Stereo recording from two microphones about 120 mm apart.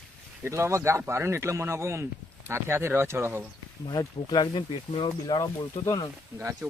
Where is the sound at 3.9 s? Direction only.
35° left (ahead or behind).